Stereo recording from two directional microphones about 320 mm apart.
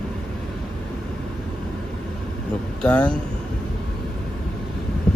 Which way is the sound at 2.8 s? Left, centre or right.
Centre.